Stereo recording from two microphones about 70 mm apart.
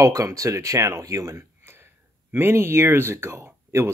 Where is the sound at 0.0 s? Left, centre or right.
Right.